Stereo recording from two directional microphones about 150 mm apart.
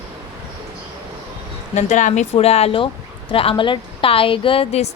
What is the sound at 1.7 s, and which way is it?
A woman's voice, 55° left (ahead or behind).